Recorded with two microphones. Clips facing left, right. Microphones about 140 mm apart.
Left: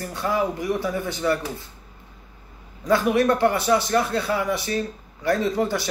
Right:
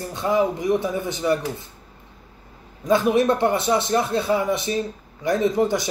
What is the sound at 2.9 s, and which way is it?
A man's voice, 20° right (ahead or behind).